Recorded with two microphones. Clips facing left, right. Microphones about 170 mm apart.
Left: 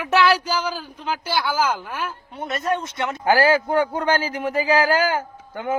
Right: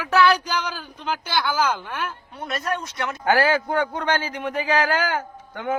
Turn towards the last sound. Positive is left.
turn(degrees=10)  # may be behind; listen again after turning